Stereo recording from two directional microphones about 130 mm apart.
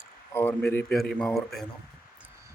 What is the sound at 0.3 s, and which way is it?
Speech, 15° left (ahead or behind).